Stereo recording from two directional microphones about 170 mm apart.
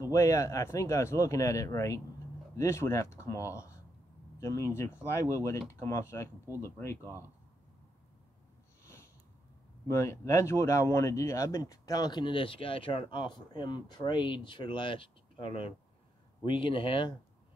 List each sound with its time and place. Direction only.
0.0 s speech: 20° left (ahead or behind)
9.8 s speech: 15° left (ahead or behind)